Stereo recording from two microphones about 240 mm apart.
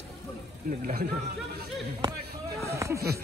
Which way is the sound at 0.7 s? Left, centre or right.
Right.